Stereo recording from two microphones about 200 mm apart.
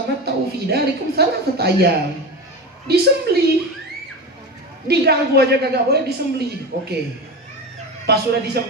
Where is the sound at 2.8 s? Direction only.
55° right (ahead or behind).